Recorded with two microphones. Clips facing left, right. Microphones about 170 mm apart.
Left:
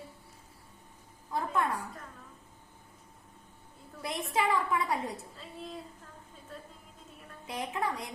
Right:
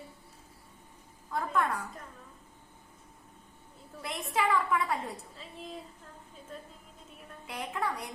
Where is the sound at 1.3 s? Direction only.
25° left (ahead or behind).